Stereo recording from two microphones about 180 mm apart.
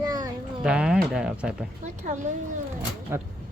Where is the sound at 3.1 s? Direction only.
10° right (ahead or behind).